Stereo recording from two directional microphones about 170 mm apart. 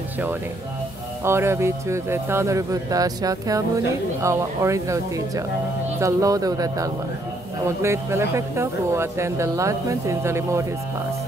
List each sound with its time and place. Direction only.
1.2 s speech: 15° right (ahead or behind)